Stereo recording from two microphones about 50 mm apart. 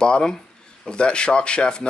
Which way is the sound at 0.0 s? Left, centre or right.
Centre.